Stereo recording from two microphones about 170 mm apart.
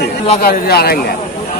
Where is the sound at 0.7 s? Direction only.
65° left (ahead or behind).